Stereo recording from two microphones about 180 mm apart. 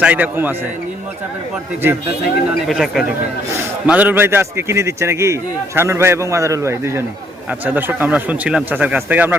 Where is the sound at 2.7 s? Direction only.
Centre (ahead or behind).